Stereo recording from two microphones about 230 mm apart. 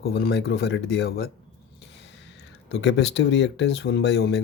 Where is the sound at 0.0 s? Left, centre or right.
Left.